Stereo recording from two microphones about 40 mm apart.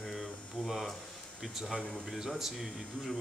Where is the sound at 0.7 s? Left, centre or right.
Centre.